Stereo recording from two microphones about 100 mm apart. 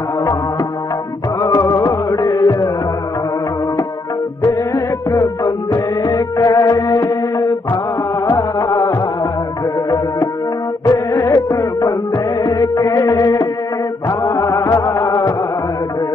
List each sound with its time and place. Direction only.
1.4 s music: 35° left (ahead or behind)
4.4 s music: 30° left (ahead or behind)
10.9 s music: 35° left (ahead or behind)